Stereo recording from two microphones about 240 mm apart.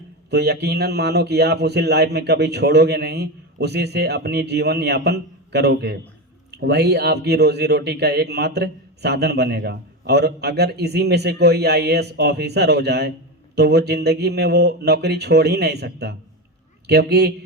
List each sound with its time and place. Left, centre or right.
0.3 s a man's voice: right